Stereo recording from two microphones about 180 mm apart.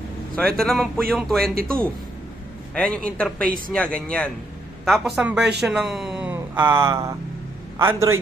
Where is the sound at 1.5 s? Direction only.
55° right (ahead or behind).